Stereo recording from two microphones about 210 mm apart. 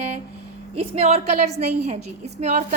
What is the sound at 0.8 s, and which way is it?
A woman's voice, 30° right (ahead or behind).